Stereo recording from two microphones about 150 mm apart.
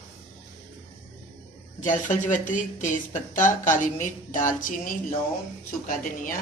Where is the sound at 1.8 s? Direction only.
55° left (ahead or behind).